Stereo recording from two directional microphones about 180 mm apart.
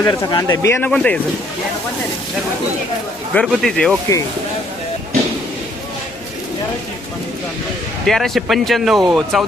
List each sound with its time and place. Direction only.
0.0 s speech: 20° left (ahead or behind)
0.9 s speech: 5° left (ahead or behind)
3.3 s speech: centre (ahead or behind)
8.0 s speech: centre (ahead or behind)